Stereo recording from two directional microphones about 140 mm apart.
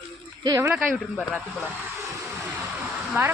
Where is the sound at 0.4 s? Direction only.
25° right (ahead or behind).